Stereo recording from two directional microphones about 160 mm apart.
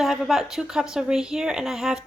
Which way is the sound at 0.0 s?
Centre (ahead or behind).